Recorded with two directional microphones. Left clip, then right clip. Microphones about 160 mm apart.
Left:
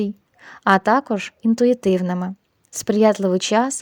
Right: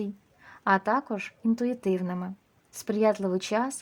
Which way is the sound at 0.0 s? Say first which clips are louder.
Left 10 dB; 45° left (ahead or behind).